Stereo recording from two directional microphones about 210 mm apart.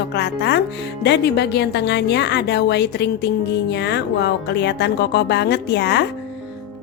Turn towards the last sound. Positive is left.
turn(degrees=55)  # may be behind; listen again after turning